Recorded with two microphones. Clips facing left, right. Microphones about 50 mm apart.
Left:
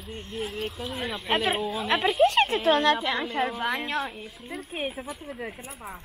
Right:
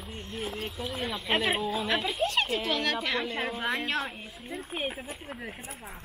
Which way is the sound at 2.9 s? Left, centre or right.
Left.